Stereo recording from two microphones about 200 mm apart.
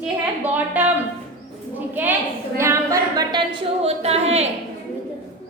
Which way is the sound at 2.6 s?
15° right (ahead or behind).